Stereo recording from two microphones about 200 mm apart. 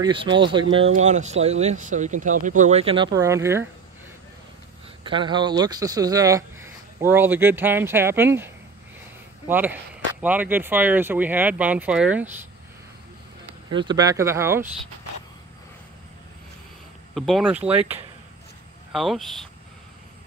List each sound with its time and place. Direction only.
0.0 s speech: 25° right (ahead or behind)
0.9 s speech: 35° right (ahead or behind)
3.2 s speech: 15° right (ahead or behind)
5.0 s speech: 25° right (ahead or behind)
9.5 s speech: 10° right (ahead or behind)
13.7 s speech: 25° right (ahead or behind)
17.1 s speech: centre (ahead or behind)
18.9 s speech: centre (ahead or behind)